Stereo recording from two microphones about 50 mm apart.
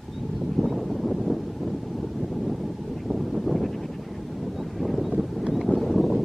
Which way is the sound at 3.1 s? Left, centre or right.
Centre.